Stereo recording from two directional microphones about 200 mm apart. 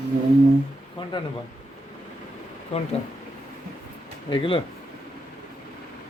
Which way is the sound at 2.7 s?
30° left (ahead or behind).